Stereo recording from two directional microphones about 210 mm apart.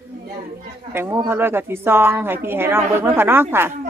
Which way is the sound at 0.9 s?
10° right (ahead or behind).